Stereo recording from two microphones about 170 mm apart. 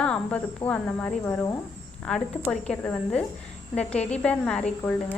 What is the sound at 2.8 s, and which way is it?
A woman's voice, 5° left (ahead or behind).